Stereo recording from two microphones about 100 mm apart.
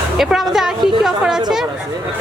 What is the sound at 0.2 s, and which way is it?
A woman's voice, 5° right (ahead or behind).